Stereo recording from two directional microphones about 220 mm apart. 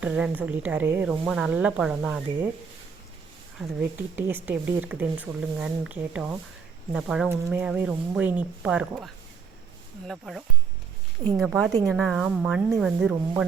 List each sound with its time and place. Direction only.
0.0 s speech: 5° right (ahead or behind)
3.6 s speech: 10° right (ahead or behind)
10.1 s speech: centre (ahead or behind)
11.7 s speech: 15° right (ahead or behind)
11.9 s speech: centre (ahead or behind)